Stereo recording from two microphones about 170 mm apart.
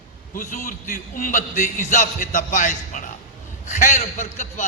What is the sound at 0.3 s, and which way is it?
A man's voice, 50° left (ahead or behind).